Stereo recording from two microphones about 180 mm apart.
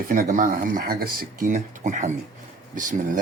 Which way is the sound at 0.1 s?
50° right (ahead or behind).